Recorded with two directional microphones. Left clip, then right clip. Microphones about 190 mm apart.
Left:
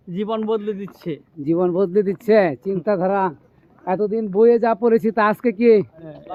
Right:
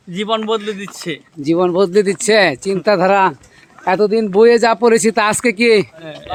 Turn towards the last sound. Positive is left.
turn(degrees=-25)  # may be behind; listen again after turning